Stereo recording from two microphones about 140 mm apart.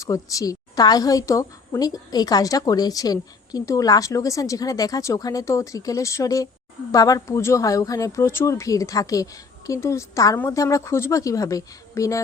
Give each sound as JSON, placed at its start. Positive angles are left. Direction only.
{"t": 0.0, "sound": "a woman's voice", "side_deg": 25}